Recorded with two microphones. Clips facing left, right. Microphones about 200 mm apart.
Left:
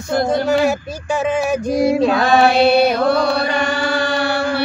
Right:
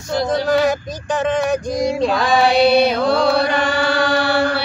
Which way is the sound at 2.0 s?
55° left (ahead or behind).